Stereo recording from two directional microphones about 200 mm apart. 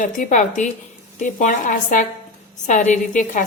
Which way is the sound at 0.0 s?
40° left (ahead or behind).